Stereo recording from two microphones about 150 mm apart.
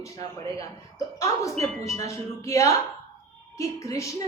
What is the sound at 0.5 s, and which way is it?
A woman's voice, 20° left (ahead or behind).